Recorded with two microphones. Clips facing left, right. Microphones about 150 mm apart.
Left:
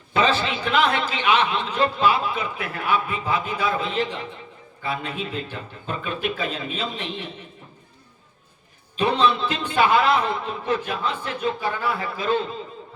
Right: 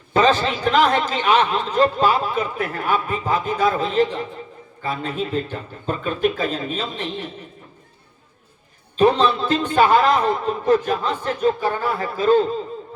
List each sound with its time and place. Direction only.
0.1 s speech: 40° right (ahead or behind)
9.0 s speech: 40° right (ahead or behind)